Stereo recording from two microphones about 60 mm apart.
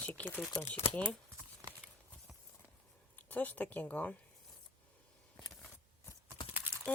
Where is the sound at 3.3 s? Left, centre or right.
Left.